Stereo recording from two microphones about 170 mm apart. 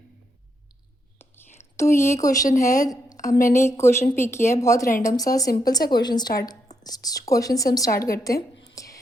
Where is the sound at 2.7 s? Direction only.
20° left (ahead or behind).